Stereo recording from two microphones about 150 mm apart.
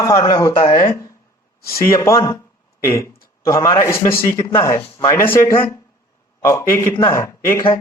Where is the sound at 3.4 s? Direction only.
20° left (ahead or behind).